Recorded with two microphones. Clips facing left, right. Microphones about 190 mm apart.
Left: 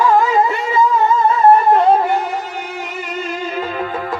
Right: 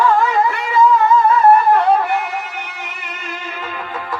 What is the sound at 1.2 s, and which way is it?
Music, 25° left (ahead or behind).